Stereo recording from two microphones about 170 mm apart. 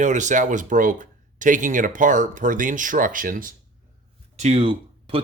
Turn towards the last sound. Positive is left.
turn(degrees=-30)  # may be behind; listen again after turning